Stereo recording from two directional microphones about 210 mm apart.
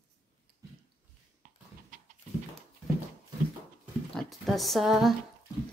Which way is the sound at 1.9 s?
40° right (ahead or behind).